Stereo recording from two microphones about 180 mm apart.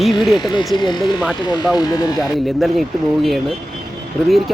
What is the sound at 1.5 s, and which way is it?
Speech, 20° left (ahead or behind).